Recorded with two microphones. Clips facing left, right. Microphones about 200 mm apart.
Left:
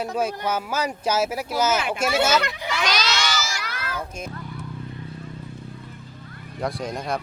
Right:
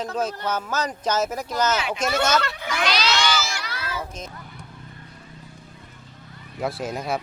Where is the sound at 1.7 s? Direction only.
50° left (ahead or behind).